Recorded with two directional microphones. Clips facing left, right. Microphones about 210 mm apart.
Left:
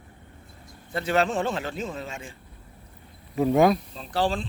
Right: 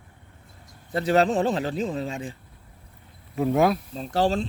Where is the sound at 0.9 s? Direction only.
35° right (ahead or behind).